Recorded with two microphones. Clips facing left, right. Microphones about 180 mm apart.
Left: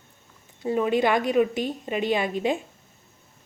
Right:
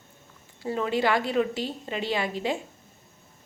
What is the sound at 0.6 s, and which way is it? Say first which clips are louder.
A woman's voice: left 4 dB; 20° left (ahead or behind).